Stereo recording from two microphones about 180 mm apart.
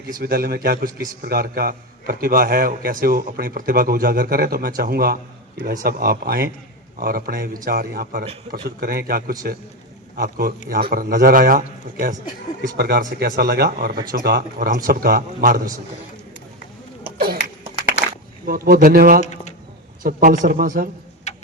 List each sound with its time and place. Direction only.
0.2 s a man's voice: 60° right (ahead or behind)
17.2 s a sound: 55° right (ahead or behind)
18.4 s speech: 55° right (ahead or behind)
19.2 s a sound: 40° left (ahead or behind)
20.0 s speech: 50° right (ahead or behind)
21.3 s tick-tock: 40° left (ahead or behind)